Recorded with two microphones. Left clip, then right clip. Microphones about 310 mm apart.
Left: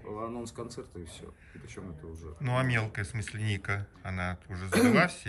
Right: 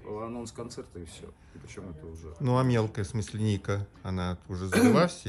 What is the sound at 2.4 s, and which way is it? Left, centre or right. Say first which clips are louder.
Speech: right 3 dB; centre.